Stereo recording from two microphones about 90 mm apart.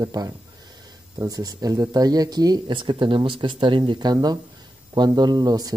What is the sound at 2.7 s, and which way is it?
Speech, 65° right (ahead or behind).